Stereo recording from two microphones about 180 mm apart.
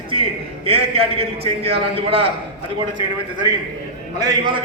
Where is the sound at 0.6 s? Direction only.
30° right (ahead or behind).